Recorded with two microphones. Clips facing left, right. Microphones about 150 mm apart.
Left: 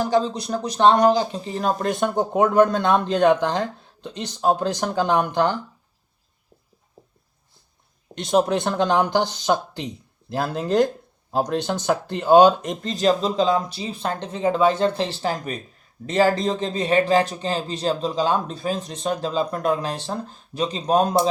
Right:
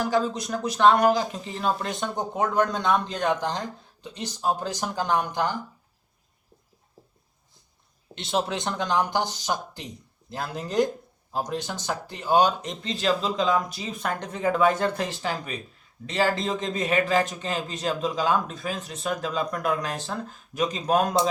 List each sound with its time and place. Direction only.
0.0 s speech: 35° left (ahead or behind); by 5.5 s 65° left (ahead or behind)
8.1 s speech: 45° left (ahead or behind); by 12.4 s 65° left (ahead or behind)
12.6 s speech: 45° left (ahead or behind)